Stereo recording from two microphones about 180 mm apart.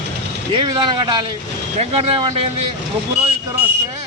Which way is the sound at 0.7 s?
25° right (ahead or behind).